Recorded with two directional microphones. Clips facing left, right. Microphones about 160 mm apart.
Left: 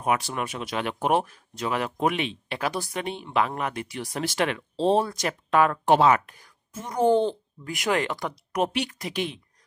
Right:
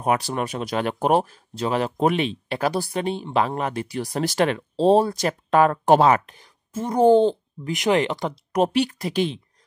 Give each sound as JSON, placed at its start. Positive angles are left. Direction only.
{"t": 0.0, "sound": "speech", "side_deg": -35}
{"t": 6.2, "sound": "speech", "side_deg": -25}